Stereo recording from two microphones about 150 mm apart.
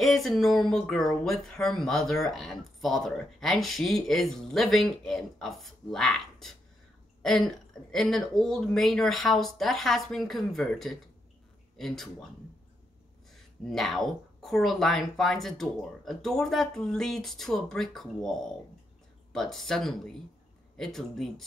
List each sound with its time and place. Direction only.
0.0 s a man's voice: centre (ahead or behind)
13.3 s speech: centre (ahead or behind)
19.3 s speech: centre (ahead or behind)